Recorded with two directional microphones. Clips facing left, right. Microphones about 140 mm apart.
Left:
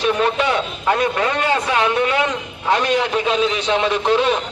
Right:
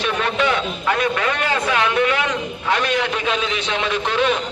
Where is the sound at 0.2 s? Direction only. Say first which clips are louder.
Left 2 dB; 25° left (ahead or behind).